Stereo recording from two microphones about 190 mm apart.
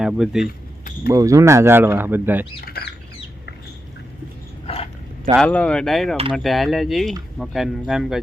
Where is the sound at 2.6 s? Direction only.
55° left (ahead or behind).